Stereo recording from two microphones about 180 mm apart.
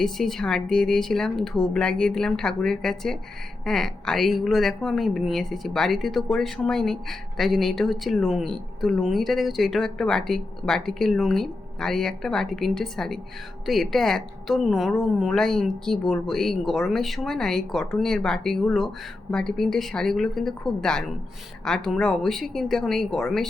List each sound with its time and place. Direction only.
0.0 s speech: centre (ahead or behind)